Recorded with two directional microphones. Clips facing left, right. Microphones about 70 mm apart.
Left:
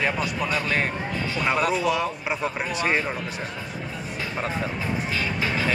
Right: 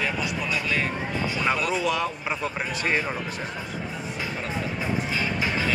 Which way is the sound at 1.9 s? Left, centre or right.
Centre.